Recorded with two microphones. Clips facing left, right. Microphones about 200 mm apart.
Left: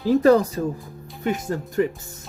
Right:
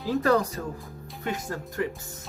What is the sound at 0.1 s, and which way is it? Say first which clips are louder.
Speech: left 7 dB; 20° left (ahead or behind).